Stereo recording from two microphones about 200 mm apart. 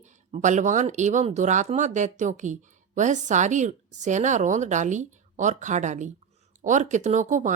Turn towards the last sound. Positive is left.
turn(degrees=-40)  # may be behind; listen again after turning